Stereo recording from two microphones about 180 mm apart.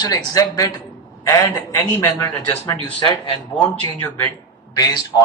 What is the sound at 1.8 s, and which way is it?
A man's voice, 10° left (ahead or behind).